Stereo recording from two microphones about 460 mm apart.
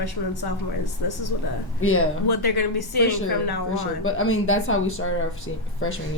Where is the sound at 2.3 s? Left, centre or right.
Left.